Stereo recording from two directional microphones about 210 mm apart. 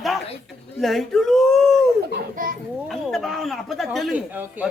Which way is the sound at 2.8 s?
Centre (ahead or behind).